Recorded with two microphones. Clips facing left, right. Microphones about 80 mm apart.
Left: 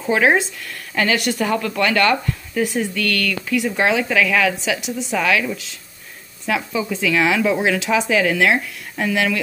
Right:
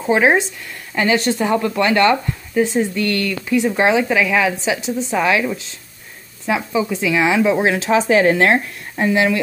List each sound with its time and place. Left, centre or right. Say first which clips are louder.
0.0 s speech: right 2 dB; right
8.9 s speech: right 4 dB; right